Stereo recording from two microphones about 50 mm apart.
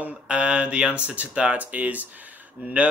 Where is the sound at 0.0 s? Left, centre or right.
Right.